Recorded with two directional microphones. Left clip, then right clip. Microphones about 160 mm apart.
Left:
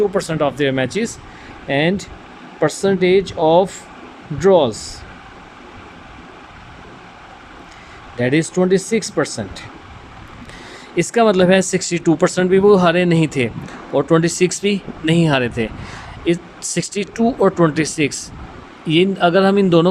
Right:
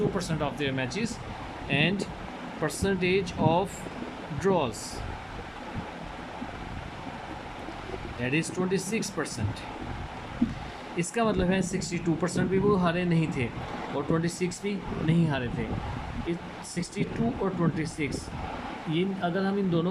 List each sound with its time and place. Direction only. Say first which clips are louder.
0.2 s speech: left 13 dB; 55° left (ahead or behind)
8.2 s speech: left 13 dB; 50° left (ahead or behind)
10.9 s speech: left 14 dB; 65° left (ahead or behind)
16.2 s speech: left 17 dB; 85° left
18.9 s a man's voice: left 16 dB; 75° left (ahead or behind)